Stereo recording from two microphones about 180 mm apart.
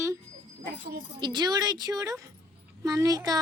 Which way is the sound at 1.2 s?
25° right (ahead or behind).